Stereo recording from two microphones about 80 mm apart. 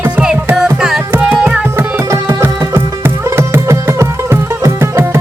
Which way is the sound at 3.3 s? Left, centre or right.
Right.